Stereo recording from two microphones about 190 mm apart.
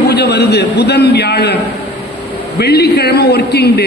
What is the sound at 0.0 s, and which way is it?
A man's voice, 60° left (ahead or behind).